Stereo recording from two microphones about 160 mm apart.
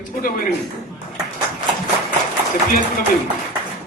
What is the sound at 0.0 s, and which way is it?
Speech, 65° left (ahead or behind).